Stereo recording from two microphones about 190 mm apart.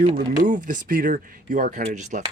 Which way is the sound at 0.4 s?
45° right (ahead or behind).